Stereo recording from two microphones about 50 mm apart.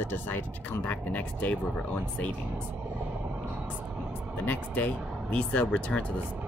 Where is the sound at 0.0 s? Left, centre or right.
Left.